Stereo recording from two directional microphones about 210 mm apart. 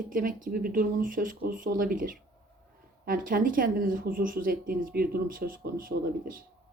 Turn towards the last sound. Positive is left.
turn(degrees=-40)  # may be behind; listen again after turning